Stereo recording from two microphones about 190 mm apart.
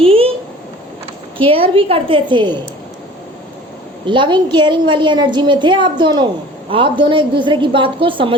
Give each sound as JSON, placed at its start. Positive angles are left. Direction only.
{"t": 0.0, "sound": "a sound", "side_deg": -30}
{"t": 1.5, "sound": "a woman's voice", "side_deg": -30}
{"t": 4.0, "sound": "a woman's voice", "side_deg": -25}